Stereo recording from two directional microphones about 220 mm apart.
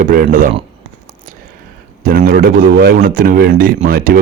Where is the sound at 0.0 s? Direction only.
40° right (ahead or behind).